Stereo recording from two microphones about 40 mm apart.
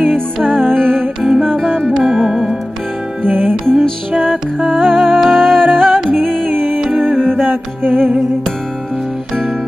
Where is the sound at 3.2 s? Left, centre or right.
Right.